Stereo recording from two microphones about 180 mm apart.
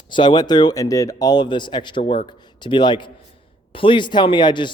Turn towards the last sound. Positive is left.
turn(degrees=25)  # may be behind; listen again after turning